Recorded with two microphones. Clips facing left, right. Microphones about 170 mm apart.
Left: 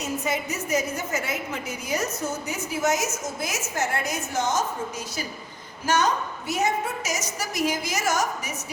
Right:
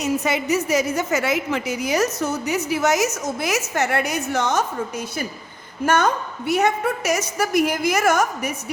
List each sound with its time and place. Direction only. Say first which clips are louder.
0.0 s a woman's voice: right 6 dB; 75° right (ahead or behind)
5.8 s a woman's voice: right 4 dB; 55° right (ahead or behind)